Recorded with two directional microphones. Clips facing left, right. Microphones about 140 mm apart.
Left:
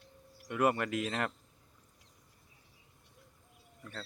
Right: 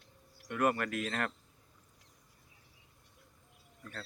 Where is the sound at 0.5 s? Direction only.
20° left (ahead or behind).